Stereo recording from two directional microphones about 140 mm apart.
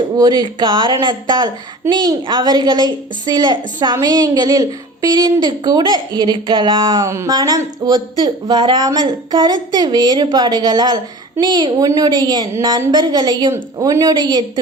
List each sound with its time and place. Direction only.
0.2 s a woman's voice: 30° right (ahead or behind)